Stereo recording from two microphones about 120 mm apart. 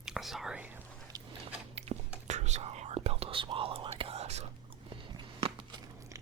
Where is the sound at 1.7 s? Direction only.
60° right (ahead or behind).